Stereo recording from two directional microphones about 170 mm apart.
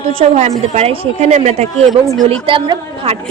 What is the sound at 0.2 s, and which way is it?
A woman's voice, 40° right (ahead or behind).